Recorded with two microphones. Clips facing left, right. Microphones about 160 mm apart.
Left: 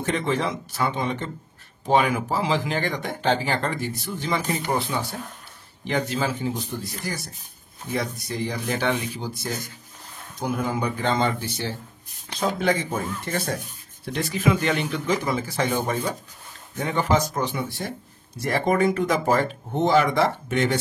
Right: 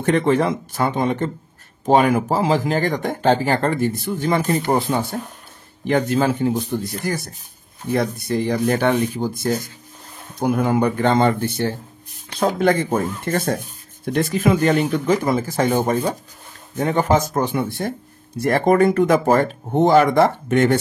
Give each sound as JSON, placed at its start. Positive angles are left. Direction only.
{"t": 0.0, "sound": "speech", "side_deg": -55}